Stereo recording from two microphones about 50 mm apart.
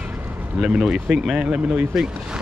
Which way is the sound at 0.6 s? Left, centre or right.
Centre.